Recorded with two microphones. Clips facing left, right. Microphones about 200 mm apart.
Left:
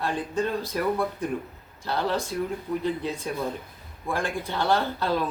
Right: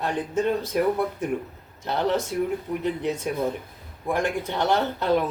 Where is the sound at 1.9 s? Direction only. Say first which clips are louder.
Right 3 dB; 20° right (ahead or behind).